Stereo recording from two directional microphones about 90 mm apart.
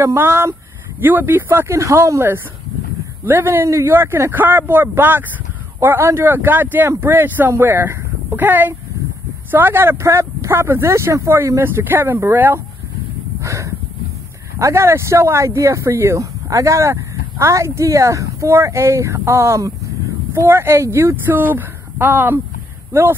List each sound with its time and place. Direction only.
0.0 s speech: 30° right (ahead or behind)
13.4 s a sound: 35° right (ahead or behind)
14.6 s speech: 30° right (ahead or behind)